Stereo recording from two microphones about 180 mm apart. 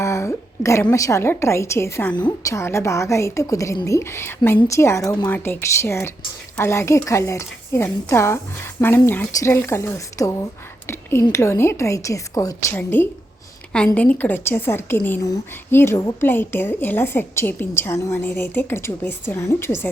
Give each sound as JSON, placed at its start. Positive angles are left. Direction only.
{"t": 0.0, "sound": "a woman's voice", "side_deg": 15}